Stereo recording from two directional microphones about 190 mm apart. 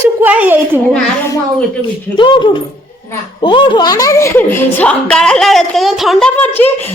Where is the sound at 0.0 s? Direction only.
10° right (ahead or behind).